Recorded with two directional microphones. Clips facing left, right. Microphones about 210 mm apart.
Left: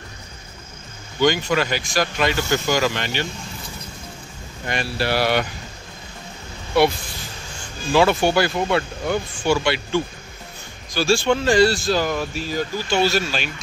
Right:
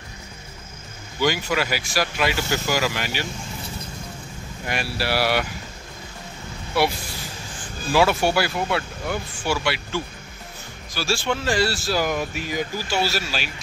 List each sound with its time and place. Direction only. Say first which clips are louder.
1.2 s speech: left 4 dB; 5° right (ahead or behind)
4.6 s speech: left 3 dB; 5° right (ahead or behind)
6.7 s speech: left 5 dB; 5° right (ahead or behind)